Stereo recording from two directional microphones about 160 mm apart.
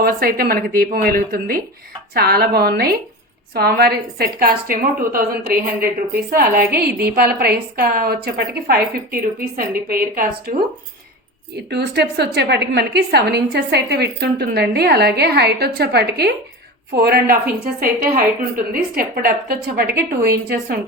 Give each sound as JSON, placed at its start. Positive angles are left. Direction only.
{"t": 0.0, "sound": "a woman's voice", "side_deg": -65}
{"t": 6.6, "sound": "a woman's voice", "side_deg": -15}
{"t": 7.0, "sound": "a woman's voice", "side_deg": -70}
{"t": 11.7, "sound": "a woman's voice", "side_deg": -90}